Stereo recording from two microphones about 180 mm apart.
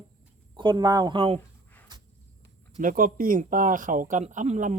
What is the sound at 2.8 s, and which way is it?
Speech, 50° right (ahead or behind).